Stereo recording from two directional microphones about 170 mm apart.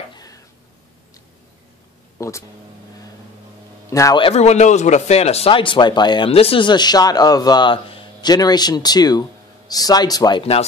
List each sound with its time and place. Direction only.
0.1 s a sound: 20° left (ahead or behind)
2.1 s speech: 15° left (ahead or behind)
3.9 s speech: 20° left (ahead or behind)
4.2 s speech: 40° left (ahead or behind); by 10.4 s 25° left (ahead or behind)